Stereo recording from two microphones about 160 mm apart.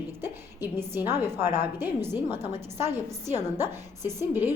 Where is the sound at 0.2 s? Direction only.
15° right (ahead or behind).